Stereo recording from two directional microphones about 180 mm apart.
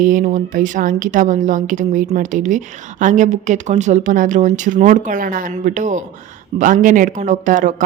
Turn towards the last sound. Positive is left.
turn(degrees=-45)  # may be behind; listen again after turning